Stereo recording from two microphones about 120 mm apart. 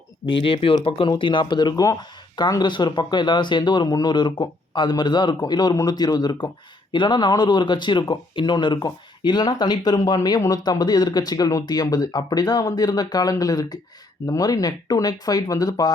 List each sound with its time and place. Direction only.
0.3 s speech: 50° left (ahead or behind); by 15.9 s 30° left (ahead or behind)